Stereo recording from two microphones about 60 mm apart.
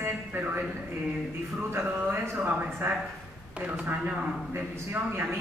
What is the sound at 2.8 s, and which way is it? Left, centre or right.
A man's voice, right.